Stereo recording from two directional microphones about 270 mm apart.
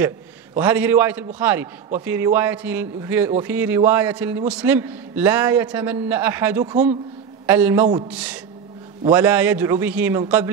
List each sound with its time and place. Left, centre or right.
0.6 s a man's voice: centre